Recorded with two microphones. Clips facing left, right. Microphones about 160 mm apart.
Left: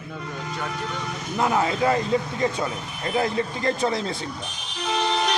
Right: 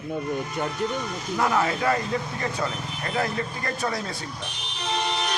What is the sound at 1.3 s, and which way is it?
Speech, 20° left (ahead or behind).